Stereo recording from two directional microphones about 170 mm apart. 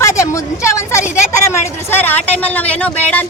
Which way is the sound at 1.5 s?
10° left (ahead or behind).